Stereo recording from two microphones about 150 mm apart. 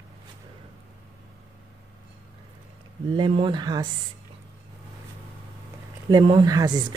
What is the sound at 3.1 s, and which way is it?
Speech, 35° right (ahead or behind).